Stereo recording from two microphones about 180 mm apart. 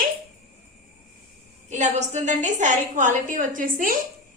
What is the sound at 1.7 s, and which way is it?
A woman's voice, 40° right (ahead or behind).